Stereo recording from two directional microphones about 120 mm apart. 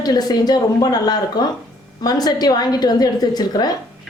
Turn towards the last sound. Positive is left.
turn(degrees=35)  # may be behind; listen again after turning